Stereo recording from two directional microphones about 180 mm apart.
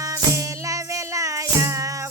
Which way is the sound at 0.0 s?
15° right (ahead or behind).